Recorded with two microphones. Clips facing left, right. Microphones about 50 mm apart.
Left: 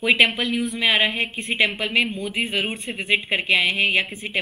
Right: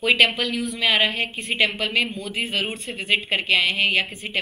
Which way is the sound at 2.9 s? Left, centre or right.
Left.